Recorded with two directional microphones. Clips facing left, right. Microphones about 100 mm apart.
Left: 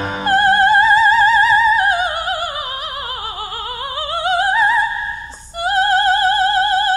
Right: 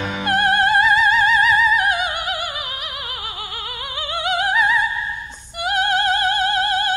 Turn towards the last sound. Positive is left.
turn(degrees=35)  # may be behind; listen again after turning